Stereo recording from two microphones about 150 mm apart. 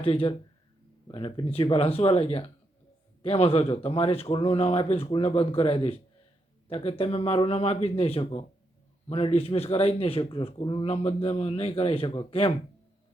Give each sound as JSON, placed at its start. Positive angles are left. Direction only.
{"t": 0.0, "sound": "speech", "side_deg": 35}